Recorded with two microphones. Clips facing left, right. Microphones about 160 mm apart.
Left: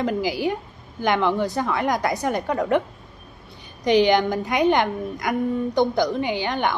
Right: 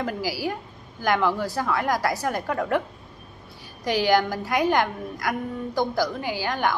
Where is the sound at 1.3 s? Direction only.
20° left (ahead or behind).